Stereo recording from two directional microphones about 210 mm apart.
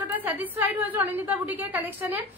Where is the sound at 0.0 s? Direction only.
10° right (ahead or behind).